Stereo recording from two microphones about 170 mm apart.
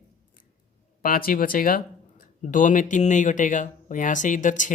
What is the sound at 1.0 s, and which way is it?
Speech, 60° left (ahead or behind).